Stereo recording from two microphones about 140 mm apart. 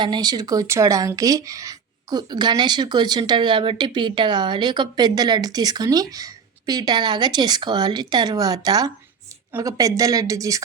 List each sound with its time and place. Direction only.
0.0 s speech: 30° right (ahead or behind)